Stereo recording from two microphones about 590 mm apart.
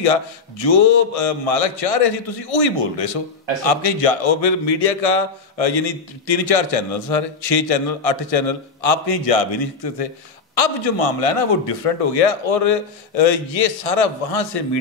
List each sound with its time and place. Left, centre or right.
0.0 s speech: left